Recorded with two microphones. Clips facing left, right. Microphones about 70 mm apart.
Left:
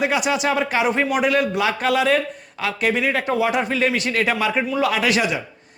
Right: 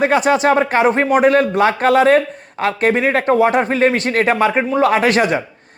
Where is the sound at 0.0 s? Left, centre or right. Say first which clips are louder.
Right 7 dB; right.